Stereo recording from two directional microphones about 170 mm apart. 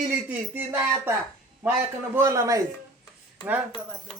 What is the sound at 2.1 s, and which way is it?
Speech, 15° right (ahead or behind).